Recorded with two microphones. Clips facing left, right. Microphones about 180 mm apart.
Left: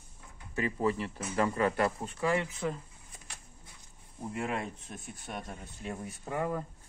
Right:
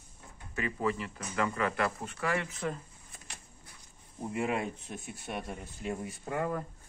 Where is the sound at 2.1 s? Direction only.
15° left (ahead or behind).